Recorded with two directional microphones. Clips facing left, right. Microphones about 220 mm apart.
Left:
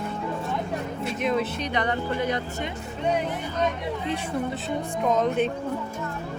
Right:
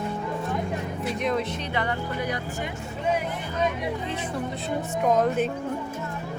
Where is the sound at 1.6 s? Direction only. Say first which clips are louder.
Left 2 dB; 20° left (ahead or behind).